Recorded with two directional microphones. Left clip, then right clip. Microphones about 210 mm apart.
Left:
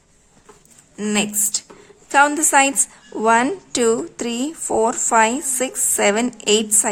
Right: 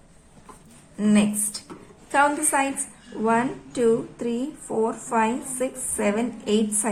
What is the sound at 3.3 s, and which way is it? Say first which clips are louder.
Speech: left 7 dB; 50° left (ahead or behind).